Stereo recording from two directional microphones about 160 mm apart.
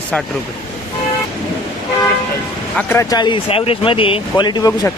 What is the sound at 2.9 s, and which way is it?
A man's voice, 20° left (ahead or behind).